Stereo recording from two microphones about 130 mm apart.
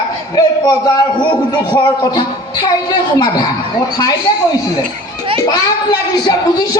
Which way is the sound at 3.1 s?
30° left (ahead or behind).